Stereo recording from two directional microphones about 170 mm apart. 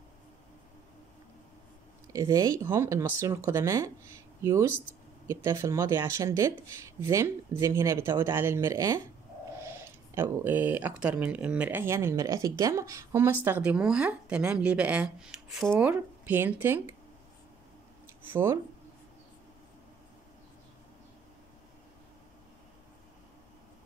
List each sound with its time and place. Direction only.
2.1 s speech: 20° right (ahead or behind)
10.1 s speech: 15° right (ahead or behind)
18.2 s speech: 15° right (ahead or behind)